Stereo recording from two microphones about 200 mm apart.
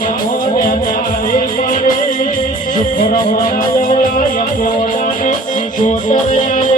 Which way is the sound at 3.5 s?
40° left (ahead or behind).